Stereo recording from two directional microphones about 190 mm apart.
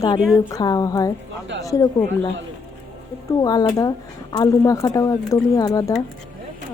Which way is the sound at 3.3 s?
20° left (ahead or behind).